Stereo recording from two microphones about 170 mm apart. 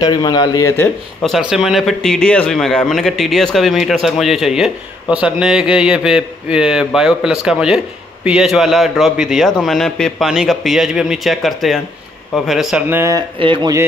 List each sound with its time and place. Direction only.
0.0 s speech: 25° left (ahead or behind)
1.5 s speech: centre (ahead or behind)
12.9 s speech: 15° right (ahead or behind)
13.4 s speech: 30° right (ahead or behind)